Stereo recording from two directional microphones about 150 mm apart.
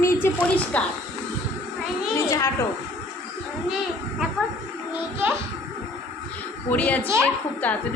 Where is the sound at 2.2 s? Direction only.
20° left (ahead or behind).